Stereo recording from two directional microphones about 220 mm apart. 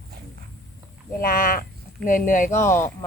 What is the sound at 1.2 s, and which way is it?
Speech, 40° left (ahead or behind).